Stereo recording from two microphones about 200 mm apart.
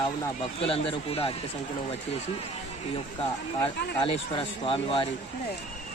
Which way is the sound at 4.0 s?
25° left (ahead or behind).